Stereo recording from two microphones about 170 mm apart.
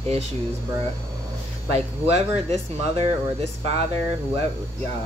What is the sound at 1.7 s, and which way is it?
Speech, 35° right (ahead or behind).